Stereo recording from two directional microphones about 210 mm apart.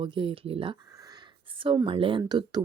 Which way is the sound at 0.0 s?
25° right (ahead or behind).